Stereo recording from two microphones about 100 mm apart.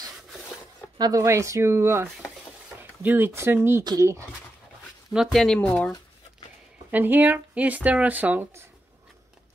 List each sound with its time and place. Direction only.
0.9 s speech: 40° right (ahead or behind)
1.2 s speech: 30° right (ahead or behind)
5.1 s speech: centre (ahead or behind)
6.9 s speech: 20° right (ahead or behind)